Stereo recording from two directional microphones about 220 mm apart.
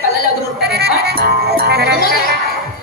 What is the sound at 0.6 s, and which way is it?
Music, 45° right (ahead or behind).